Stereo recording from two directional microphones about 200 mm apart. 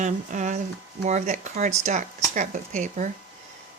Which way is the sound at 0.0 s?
40° right (ahead or behind).